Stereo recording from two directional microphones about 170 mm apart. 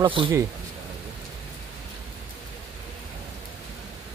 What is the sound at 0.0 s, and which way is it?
Speech, 30° right (ahead or behind).